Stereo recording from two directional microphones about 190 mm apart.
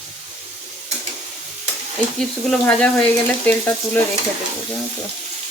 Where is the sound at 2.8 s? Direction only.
5° left (ahead or behind).